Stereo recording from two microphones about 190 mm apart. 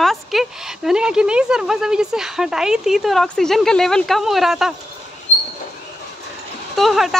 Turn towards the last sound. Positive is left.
turn(degrees=0)  # may be behind; listen again after turning